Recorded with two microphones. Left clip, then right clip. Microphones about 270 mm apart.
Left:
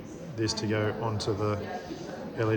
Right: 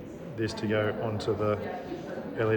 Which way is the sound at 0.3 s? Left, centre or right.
Left.